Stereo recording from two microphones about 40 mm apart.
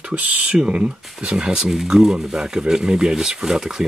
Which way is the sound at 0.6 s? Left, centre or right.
Right.